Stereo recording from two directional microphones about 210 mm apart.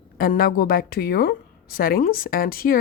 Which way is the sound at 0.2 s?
45° left (ahead or behind).